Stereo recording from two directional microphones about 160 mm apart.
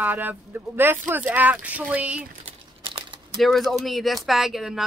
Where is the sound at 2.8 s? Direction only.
30° right (ahead or behind).